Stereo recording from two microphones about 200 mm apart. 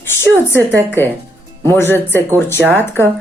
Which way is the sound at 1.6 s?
10° left (ahead or behind).